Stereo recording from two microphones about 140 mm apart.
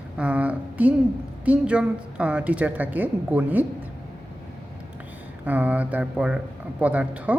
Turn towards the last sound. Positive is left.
turn(degrees=-10)  # may be behind; listen again after turning